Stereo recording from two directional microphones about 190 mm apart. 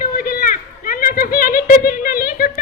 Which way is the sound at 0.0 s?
50° left (ahead or behind).